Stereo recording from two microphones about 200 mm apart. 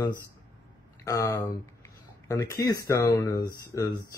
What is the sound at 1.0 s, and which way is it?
A man's voice, 15° left (ahead or behind).